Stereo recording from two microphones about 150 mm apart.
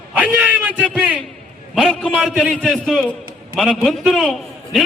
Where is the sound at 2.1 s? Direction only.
10° right (ahead or behind).